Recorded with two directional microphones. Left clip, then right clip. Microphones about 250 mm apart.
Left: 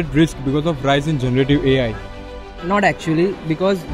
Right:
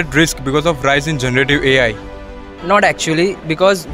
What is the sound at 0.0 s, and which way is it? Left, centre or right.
Speech, right.